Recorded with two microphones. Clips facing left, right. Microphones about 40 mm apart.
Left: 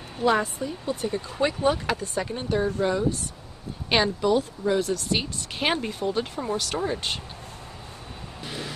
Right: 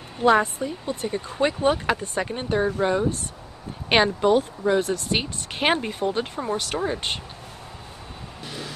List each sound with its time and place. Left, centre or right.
0.3 s speech: centre
3.9 s speech: right
8.5 s vehicle: centre